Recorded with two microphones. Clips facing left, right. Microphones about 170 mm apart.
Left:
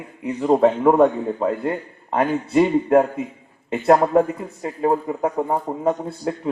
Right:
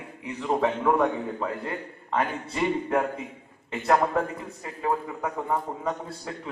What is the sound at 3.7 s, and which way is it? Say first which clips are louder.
A man's voice: left 8 dB; 35° left (ahead or behind).